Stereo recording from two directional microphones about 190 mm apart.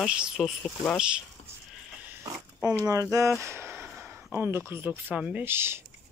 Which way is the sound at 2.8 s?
15° right (ahead or behind).